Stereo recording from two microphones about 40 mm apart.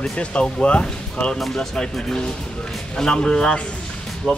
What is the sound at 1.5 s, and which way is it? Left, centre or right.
Speech, centre.